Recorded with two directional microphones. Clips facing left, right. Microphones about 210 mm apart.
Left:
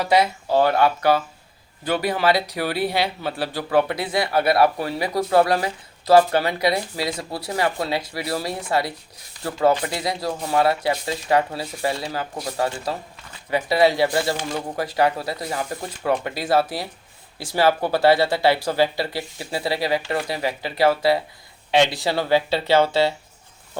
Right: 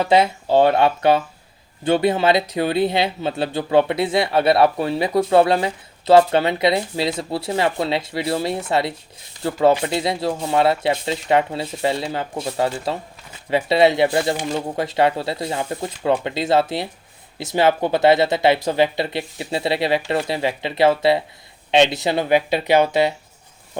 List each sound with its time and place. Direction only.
0.0 s speech: 25° right (ahead or behind)